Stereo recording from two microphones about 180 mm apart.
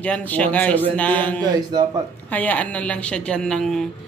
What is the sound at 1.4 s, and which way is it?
Speech, 20° right (ahead or behind).